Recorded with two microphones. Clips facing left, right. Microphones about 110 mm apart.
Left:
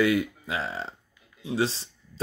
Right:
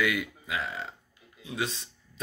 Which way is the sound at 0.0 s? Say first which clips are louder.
Left 6 dB; 30° left (ahead or behind).